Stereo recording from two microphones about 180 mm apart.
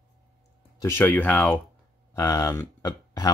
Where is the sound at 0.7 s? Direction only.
15° left (ahead or behind).